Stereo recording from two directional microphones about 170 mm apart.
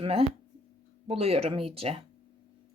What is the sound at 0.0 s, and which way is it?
Speech, 35° right (ahead or behind).